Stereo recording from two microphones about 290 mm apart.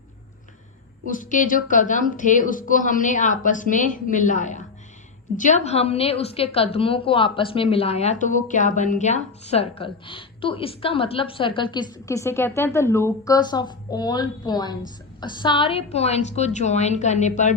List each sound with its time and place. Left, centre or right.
1.0 s a woman's voice: left